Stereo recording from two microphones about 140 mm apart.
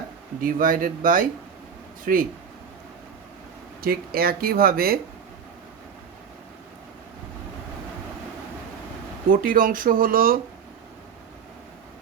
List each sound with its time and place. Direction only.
0.4 s speech: 85° right
3.8 s speech: 90° right
9.3 s speech: 80° right